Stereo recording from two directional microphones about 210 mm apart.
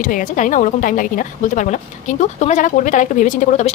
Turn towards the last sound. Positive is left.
turn(degrees=35)  # may be behind; listen again after turning